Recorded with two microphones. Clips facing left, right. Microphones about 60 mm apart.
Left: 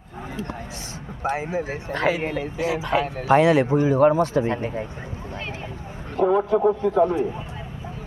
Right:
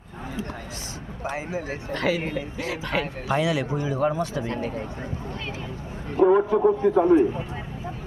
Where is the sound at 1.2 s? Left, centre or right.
Left.